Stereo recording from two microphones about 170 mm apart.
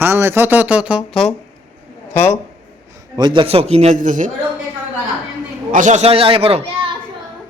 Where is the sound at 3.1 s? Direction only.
25° right (ahead or behind); by 4.3 s 45° right (ahead or behind).